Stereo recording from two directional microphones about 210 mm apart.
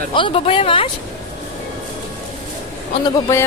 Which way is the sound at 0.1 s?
25° left (ahead or behind).